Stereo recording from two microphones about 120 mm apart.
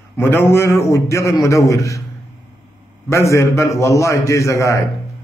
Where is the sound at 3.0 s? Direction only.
25° left (ahead or behind).